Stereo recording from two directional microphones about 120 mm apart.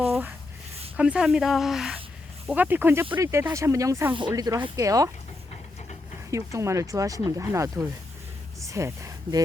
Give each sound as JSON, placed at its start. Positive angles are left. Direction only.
{"t": 0.9, "sound": "speech", "side_deg": -10}
{"t": 2.5, "sound": "speech", "side_deg": -15}
{"t": 4.1, "sound": "speech", "side_deg": -40}
{"t": 6.3, "sound": "speech", "side_deg": -25}